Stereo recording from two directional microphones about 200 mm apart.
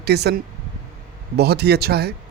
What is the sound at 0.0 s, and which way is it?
Speech, 55° right (ahead or behind).